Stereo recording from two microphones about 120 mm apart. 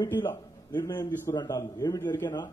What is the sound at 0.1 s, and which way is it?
Speech, 20° left (ahead or behind).